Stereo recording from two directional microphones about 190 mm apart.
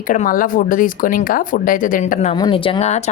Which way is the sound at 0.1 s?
45° left (ahead or behind).